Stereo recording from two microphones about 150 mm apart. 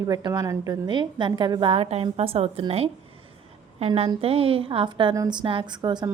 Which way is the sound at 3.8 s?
45° right (ahead or behind).